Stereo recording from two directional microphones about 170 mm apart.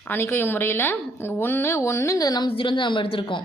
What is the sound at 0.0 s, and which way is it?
Speech, 10° left (ahead or behind).